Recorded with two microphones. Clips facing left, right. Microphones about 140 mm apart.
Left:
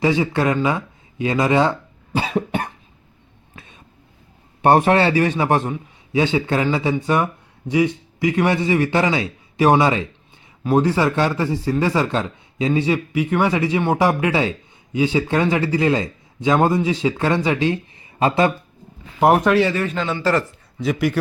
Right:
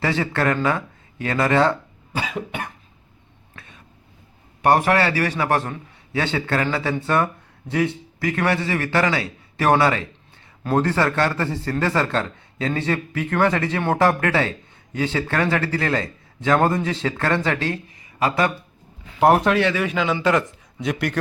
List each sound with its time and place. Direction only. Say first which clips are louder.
0.0 s a man's voice: left 3 dB; 15° left (ahead or behind)
2.1 s cough: left 6 dB; 35° left (ahead or behind)
3.5 s a sound: left 1 dB; 20° left (ahead or behind)
4.6 s a man's voice: left 3 dB; 25° left (ahead or behind)
18.2 s a man's voice: left 4 dB; 25° left (ahead or behind)
19.7 s a man's voice: right 1 dB; 5° right (ahead or behind)